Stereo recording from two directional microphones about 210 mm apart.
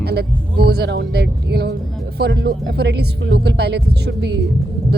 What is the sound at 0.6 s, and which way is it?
A woman's voice, 50° right (ahead or behind).